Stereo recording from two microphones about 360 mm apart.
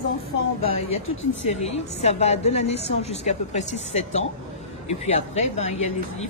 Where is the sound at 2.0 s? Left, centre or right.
Centre.